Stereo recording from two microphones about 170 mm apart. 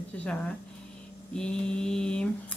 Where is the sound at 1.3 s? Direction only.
5° left (ahead or behind).